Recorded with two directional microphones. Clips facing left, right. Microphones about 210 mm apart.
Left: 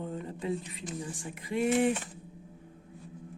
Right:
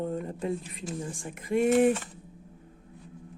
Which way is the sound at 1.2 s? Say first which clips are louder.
Right 6 dB; 45° right (ahead or behind).